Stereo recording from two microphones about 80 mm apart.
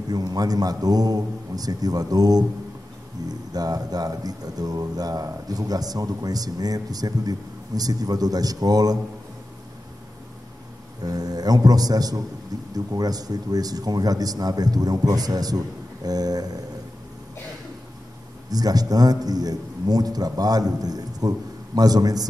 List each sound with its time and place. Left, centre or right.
0.1 s speech: right
11.0 s speech: right
18.5 s speech: right